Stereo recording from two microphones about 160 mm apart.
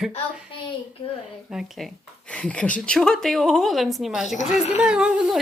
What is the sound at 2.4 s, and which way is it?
A woman's voice, 10° left (ahead or behind).